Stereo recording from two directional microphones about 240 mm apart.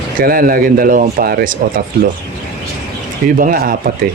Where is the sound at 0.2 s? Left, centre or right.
Right.